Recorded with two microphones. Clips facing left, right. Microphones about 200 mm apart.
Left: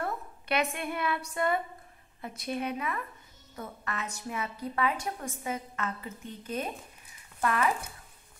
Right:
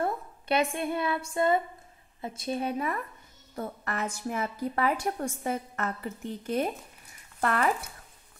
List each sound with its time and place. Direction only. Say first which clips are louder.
0.0 s a woman's voice: right 4 dB; 30° right (ahead or behind); by 6.7 s 60° right (ahead or behind)
7.3 s speech: right 2 dB; 50° right (ahead or behind)